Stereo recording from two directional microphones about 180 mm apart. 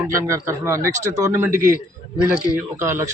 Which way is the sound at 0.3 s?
15° right (ahead or behind).